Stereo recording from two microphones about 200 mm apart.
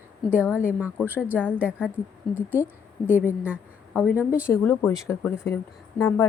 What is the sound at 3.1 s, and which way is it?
Speech, 10° left (ahead or behind).